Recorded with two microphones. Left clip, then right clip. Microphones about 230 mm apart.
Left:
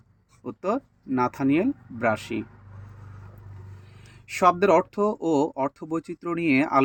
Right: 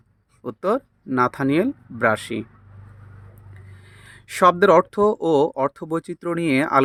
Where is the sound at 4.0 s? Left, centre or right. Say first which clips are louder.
Right 6 dB; right.